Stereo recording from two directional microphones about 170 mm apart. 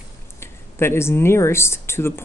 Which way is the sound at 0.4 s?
15° left (ahead or behind).